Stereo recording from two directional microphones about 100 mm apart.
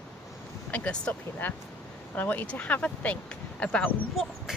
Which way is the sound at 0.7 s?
15° left (ahead or behind).